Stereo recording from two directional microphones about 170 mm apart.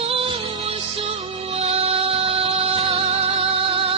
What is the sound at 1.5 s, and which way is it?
Music, 35° right (ahead or behind).